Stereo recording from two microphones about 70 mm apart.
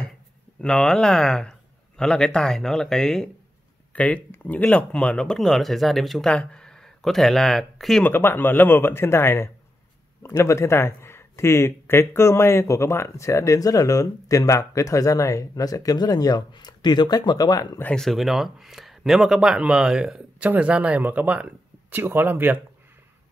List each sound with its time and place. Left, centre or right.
0.6 s a man's voice: centre
3.9 s speech: centre
6.2 s speech: centre
8.0 s speech: left
17.9 s speech: centre
20.4 s speech: right